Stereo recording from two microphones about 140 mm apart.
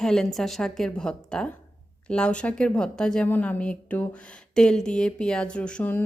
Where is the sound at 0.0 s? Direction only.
5° left (ahead or behind).